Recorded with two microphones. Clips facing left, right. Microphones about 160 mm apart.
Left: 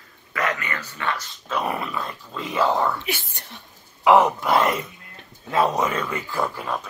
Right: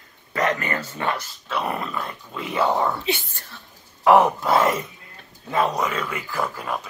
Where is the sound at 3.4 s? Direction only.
20° left (ahead or behind).